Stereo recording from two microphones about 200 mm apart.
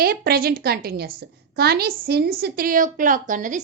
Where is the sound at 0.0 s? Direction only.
50° right (ahead or behind).